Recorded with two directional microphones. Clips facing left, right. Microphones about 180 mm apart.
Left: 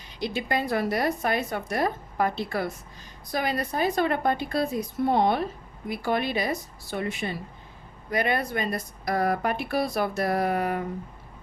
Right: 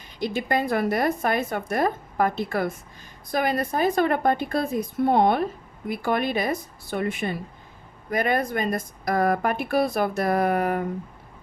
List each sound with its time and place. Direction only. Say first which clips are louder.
0.2 s speech: right 3 dB; 50° right (ahead or behind)